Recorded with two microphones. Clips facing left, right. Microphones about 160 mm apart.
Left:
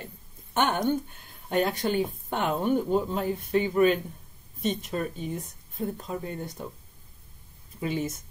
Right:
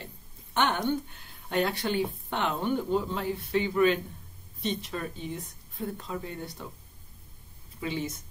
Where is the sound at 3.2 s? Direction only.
45° left (ahead or behind).